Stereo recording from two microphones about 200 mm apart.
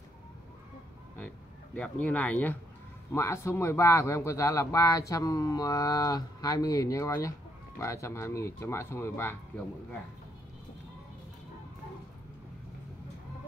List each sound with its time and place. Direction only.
1.8 s speech: 5° left (ahead or behind)